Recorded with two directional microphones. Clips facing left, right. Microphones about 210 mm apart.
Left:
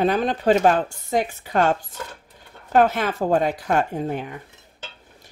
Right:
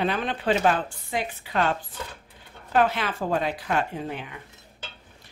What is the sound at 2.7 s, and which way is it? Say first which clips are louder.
Speech: left 5 dB; 45° left (ahead or behind).